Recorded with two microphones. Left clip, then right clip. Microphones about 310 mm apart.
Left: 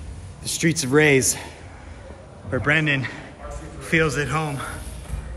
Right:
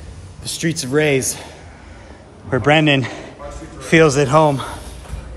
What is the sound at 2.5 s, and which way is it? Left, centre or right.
A man's voice, centre.